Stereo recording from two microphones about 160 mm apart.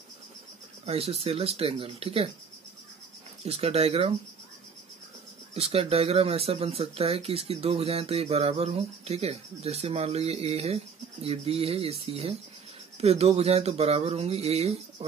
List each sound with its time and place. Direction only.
0.8 s speech: 40° right (ahead or behind)
3.4 s speech: 40° right (ahead or behind)
5.5 s speech: 40° right (ahead or behind)